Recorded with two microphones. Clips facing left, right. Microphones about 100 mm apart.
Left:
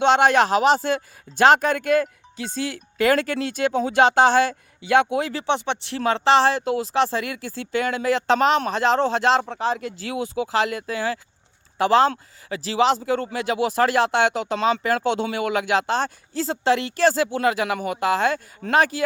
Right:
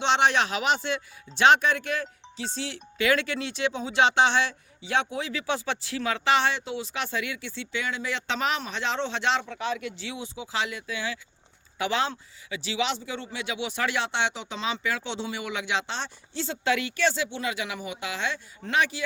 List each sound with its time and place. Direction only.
0.0 s speech: 50° left (ahead or behind)
5.3 s speech: 35° left (ahead or behind)
6.9 s speech: 35° left (ahead or behind)
10.2 s speech: 60° left (ahead or behind); by 19.0 s 45° left (ahead or behind)